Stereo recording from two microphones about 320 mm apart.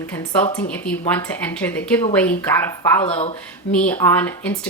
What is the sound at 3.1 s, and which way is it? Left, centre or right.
Speech, centre.